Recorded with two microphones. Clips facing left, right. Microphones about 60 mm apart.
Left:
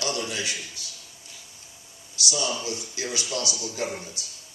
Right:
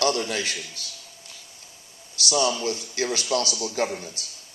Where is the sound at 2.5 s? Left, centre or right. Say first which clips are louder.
Right 4 dB; right.